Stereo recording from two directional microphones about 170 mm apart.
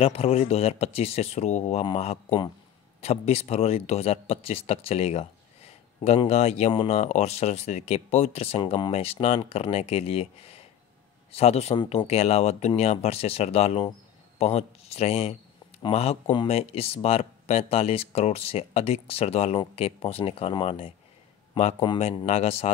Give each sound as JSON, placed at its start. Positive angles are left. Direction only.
{"t": 0.0, "sound": "speech", "side_deg": 35}